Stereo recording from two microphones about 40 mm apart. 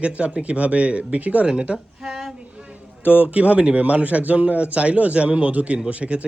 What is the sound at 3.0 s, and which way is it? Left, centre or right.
Speech, right.